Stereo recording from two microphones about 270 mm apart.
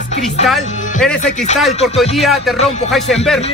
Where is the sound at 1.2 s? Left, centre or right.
Left.